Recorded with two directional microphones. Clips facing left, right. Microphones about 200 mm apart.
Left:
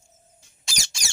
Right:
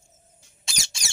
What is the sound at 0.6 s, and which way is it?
Squeak, 25° right (ahead or behind).